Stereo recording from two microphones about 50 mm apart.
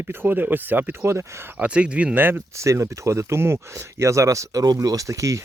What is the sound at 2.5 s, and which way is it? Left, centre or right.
Speech, right.